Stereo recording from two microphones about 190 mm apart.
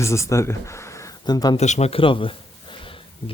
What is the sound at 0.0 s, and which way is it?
Speech, 15° left (ahead or behind).